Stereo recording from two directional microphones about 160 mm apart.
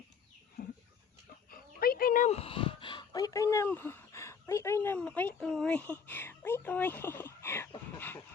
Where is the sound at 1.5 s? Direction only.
65° left (ahead or behind).